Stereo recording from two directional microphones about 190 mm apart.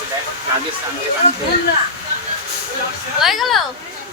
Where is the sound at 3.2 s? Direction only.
Centre (ahead or behind).